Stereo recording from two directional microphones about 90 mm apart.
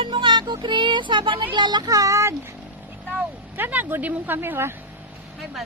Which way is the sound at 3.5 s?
20° right (ahead or behind).